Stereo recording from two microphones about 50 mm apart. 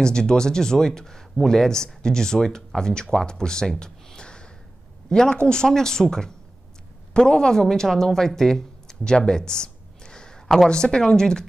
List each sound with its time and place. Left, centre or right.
0.0 s speech: centre
3.8 s a sound: centre
5.1 s speech: centre